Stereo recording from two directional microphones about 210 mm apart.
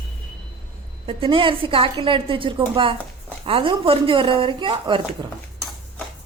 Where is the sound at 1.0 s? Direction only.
25° right (ahead or behind).